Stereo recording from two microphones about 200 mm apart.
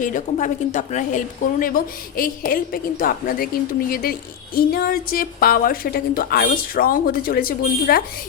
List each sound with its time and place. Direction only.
0.0 s a woman's voice: 40° left (ahead or behind)